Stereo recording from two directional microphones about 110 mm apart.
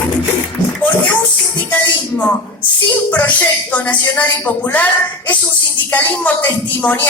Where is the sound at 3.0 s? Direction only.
15° left (ahead or behind).